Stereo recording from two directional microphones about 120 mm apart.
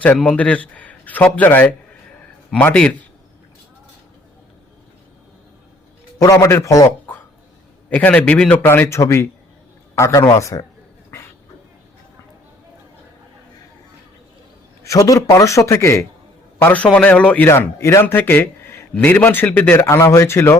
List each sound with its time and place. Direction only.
0.0 s a man's voice: 10° left (ahead or behind)
6.2 s a man's voice: 30° left (ahead or behind)
7.9 s a man's voice: 10° left (ahead or behind); by 10.7 s 25° left (ahead or behind)
14.8 s a man's voice: 30° left (ahead or behind)